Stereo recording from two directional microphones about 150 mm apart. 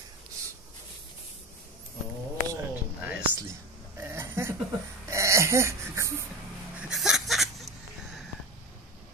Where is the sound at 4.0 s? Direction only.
15° right (ahead or behind).